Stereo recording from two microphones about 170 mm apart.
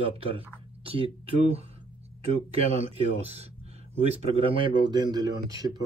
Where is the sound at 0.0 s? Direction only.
35° right (ahead or behind).